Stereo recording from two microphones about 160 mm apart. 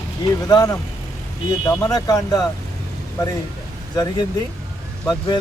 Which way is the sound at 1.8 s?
25° left (ahead or behind).